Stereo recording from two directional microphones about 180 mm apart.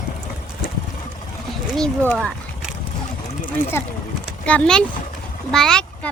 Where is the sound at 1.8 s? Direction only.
5° left (ahead or behind).